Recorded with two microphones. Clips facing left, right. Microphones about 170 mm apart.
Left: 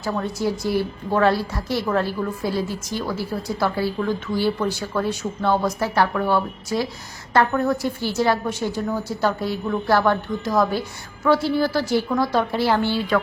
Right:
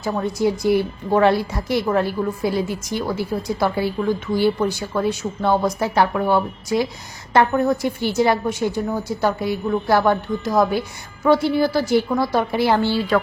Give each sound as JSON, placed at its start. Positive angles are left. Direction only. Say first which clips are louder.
{"t": 0.0, "sound": "a woman's voice", "louder": "right 3 dB", "side_deg": -15}